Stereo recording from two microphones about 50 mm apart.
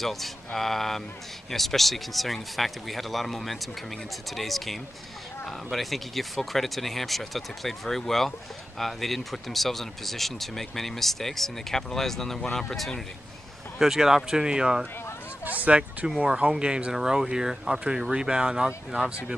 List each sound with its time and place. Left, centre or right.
0.0 s speech: centre
13.7 s speech: centre
15.6 s speech: right
16.3 s speech: centre